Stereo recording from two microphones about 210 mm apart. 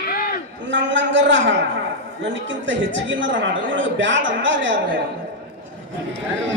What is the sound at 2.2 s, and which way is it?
A man's voice, 60° right (ahead or behind).